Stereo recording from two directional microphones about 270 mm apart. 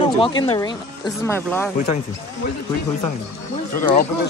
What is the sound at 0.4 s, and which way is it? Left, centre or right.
Speech, centre.